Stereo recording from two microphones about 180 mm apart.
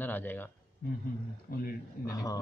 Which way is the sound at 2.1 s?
20° left (ahead or behind).